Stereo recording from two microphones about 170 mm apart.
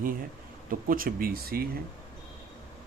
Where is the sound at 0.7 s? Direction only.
55° right (ahead or behind).